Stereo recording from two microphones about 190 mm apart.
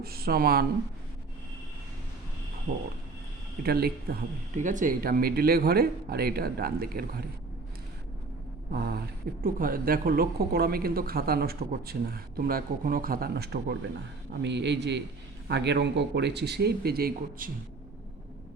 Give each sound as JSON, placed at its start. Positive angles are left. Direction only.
{"t": 0.0, "sound": "speech", "side_deg": -55}
{"t": 3.6, "sound": "speech", "side_deg": -55}
{"t": 8.7, "sound": "speech", "side_deg": -55}